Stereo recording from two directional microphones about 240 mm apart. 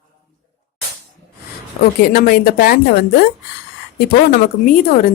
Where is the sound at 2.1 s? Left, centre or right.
Left.